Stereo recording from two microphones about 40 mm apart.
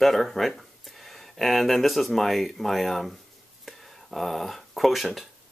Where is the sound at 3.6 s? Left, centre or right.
Centre.